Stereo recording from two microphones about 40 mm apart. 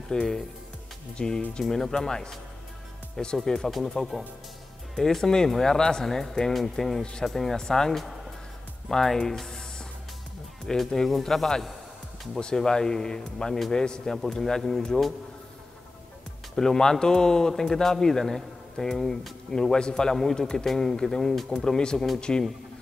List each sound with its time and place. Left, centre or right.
0.1 s speech: centre
3.4 s speech: centre
7.0 s speech: centre
7.2 s speech: centre
16.5 s speech: centre